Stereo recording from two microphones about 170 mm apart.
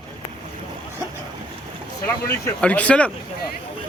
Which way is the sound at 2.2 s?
10° left (ahead or behind).